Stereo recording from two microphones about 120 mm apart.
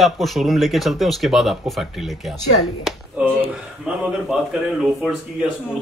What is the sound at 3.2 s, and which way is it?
Speech, 10° right (ahead or behind).